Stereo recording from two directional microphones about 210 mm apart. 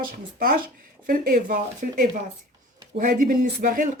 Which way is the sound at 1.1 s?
40° right (ahead or behind).